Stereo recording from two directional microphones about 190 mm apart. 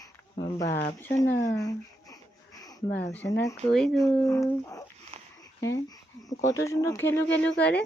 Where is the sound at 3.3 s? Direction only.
15° left (ahead or behind).